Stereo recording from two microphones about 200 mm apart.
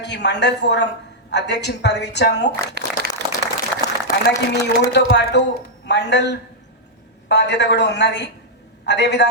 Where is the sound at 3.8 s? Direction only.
15° left (ahead or behind).